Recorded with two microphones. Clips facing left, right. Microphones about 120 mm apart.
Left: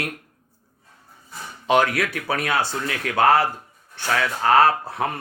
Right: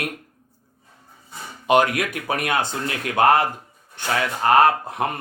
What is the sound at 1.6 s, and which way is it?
Speech, 15° right (ahead or behind).